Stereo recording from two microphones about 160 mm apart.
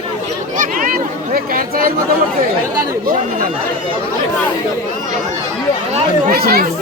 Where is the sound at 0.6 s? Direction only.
60° right (ahead or behind).